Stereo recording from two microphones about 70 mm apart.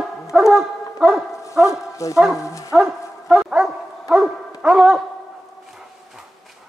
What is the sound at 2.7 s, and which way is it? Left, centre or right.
Dog, centre.